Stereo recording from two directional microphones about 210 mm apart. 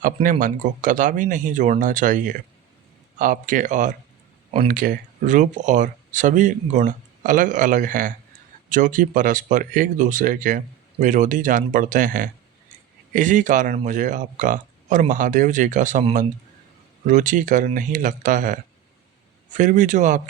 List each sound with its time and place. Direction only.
0.0 s speech: 40° right (ahead or behind)